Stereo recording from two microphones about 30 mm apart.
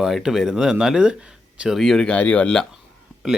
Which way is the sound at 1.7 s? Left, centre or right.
Centre.